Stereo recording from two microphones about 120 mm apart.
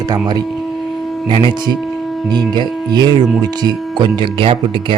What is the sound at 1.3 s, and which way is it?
Speech, 45° right (ahead or behind).